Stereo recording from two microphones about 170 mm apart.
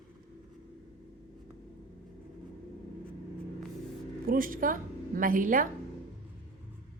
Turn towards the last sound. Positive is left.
turn(degrees=-50)  # may be behind; listen again after turning